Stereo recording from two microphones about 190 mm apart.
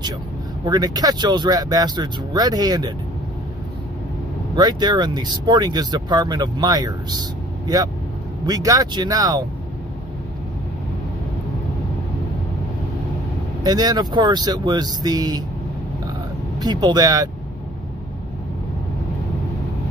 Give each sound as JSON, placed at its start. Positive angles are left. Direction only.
{"t": 0.7, "sound": "speech", "side_deg": -20}
{"t": 4.6, "sound": "speech", "side_deg": -20}
{"t": 13.7, "sound": "speech", "side_deg": -20}
{"t": 16.5, "sound": "speech", "side_deg": -20}